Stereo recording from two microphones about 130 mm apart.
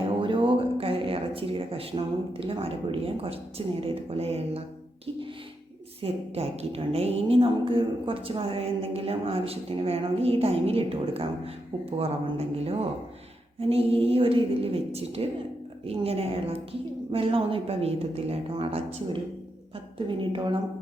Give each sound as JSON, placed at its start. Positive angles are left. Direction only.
{"t": 0.2, "sound": "a sound", "side_deg": -40}
{"t": 2.4, "sound": "a woman's voice", "side_deg": -45}
{"t": 6.0, "sound": "a woman's voice", "side_deg": -50}
{"t": 20.1, "sound": "a woman's voice", "side_deg": -40}